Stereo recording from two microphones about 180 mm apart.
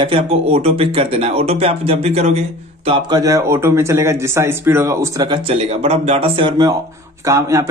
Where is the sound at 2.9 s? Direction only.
20° right (ahead or behind).